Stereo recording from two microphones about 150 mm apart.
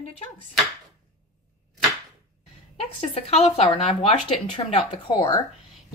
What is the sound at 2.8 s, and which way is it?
Speech, 45° left (ahead or behind).